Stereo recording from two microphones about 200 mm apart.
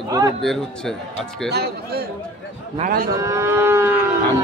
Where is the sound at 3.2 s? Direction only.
15° right (ahead or behind).